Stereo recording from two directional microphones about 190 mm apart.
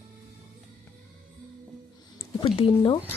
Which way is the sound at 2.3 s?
30° left (ahead or behind).